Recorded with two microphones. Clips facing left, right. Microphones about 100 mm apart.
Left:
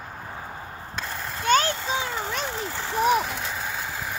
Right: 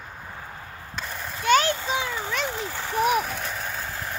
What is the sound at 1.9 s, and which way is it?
Vehicle, 25° left (ahead or behind).